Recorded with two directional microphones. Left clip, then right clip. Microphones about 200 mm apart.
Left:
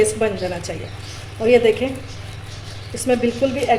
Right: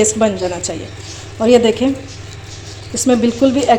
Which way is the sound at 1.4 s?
30° right (ahead or behind).